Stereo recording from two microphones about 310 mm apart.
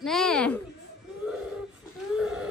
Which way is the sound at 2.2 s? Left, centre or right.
Centre.